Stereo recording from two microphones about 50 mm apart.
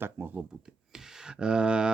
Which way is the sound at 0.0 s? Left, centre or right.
Right.